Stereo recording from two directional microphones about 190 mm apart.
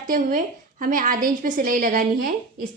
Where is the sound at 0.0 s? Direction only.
45° right (ahead or behind).